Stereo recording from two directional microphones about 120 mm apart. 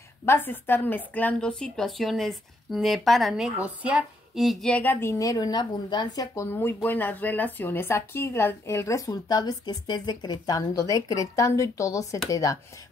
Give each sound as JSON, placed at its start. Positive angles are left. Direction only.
{"t": 0.2, "sound": "a woman's voice", "side_deg": 20}
{"t": 5.0, "sound": "speech", "side_deg": 30}